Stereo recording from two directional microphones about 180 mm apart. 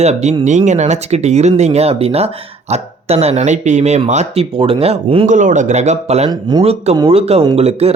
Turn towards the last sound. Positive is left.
turn(degrees=-35)  # may be behind; listen again after turning